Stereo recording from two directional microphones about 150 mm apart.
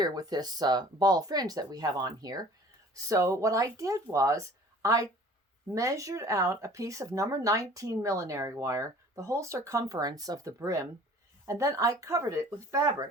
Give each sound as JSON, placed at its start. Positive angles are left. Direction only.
{"t": 0.0, "sound": "speech", "side_deg": -25}